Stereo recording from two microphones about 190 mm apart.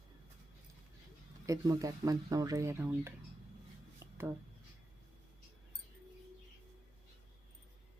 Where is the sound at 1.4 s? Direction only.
15° right (ahead or behind).